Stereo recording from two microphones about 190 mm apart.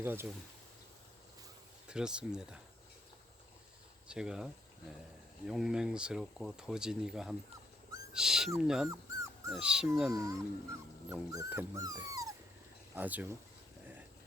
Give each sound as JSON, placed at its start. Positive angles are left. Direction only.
{"t": 0.0, "sound": "speech", "side_deg": -10}
{"t": 1.9, "sound": "speech", "side_deg": -5}
{"t": 4.1, "sound": "speech", "side_deg": -5}
{"t": 5.5, "sound": "speech", "side_deg": -5}
{"t": 8.9, "sound": "dog", "side_deg": -15}
{"t": 9.5, "sound": "speech", "side_deg": -5}
{"t": 10.1, "sound": "speech", "side_deg": -15}